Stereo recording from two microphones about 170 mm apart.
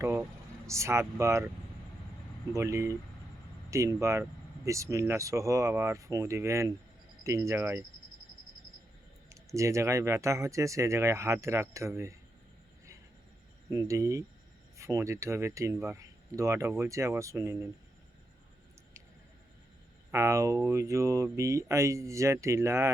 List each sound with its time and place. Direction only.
0.0 s speech: 15° right (ahead or behind)
2.5 s speech: 15° right (ahead or behind)
9.3 s speech: 20° right (ahead or behind)
13.7 s speech: 20° right (ahead or behind)
20.1 s speech: 15° right (ahead or behind)